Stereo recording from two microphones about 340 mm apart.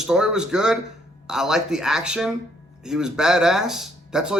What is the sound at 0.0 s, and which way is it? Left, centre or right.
Speech, centre.